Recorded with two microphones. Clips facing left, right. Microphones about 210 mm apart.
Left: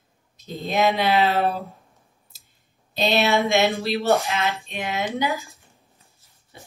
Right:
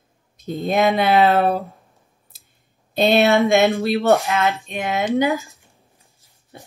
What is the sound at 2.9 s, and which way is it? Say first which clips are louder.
Speech: right 5 dB; 50° right (ahead or behind).